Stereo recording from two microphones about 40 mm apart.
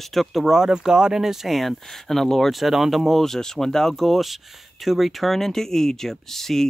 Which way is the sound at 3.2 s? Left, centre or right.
Centre.